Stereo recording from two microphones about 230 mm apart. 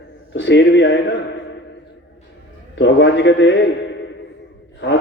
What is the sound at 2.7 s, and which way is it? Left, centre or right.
Speech, left.